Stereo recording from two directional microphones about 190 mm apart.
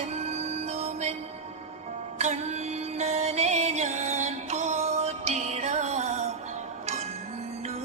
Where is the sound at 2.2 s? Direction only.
35° right (ahead or behind).